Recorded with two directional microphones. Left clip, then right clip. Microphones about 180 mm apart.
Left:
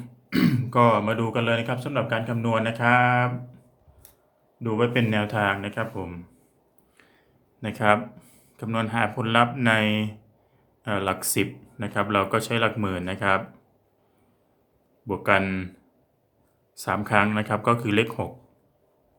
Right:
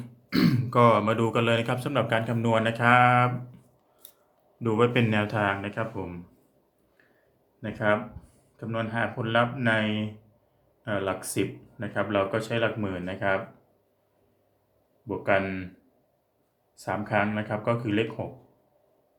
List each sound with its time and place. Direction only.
0.0 s speech: 10° left (ahead or behind)
4.6 s speech: centre (ahead or behind); by 6.1 s 15° left (ahead or behind)
7.6 s speech: 35° left (ahead or behind)
15.0 s speech: 40° left (ahead or behind)
16.7 s speech: 40° left (ahead or behind)